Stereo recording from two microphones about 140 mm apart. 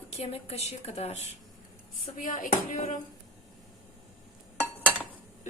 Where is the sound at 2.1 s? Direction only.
65° left (ahead or behind).